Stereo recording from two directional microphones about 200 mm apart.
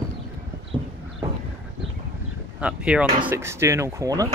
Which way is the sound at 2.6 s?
5° right (ahead or behind).